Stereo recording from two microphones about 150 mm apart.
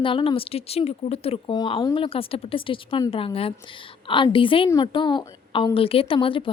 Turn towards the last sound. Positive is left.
turn(degrees=35)  # may be behind; listen again after turning